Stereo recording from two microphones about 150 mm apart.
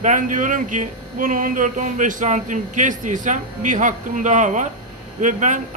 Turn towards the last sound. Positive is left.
turn(degrees=-55)  # may be behind; listen again after turning